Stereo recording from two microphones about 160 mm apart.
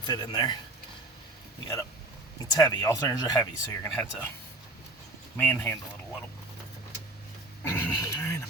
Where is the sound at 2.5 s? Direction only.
25° left (ahead or behind).